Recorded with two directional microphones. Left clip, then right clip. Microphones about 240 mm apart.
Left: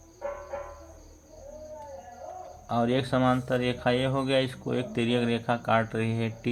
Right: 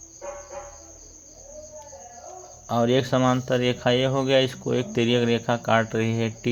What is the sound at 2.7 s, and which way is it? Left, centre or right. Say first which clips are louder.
Speech: right 5 dB; right.